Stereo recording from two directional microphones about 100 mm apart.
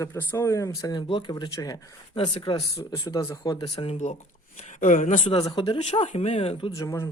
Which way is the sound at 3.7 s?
90° left.